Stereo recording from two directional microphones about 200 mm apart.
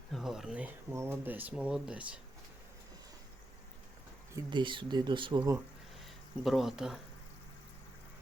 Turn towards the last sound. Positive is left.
turn(degrees=0)  # may be behind; listen again after turning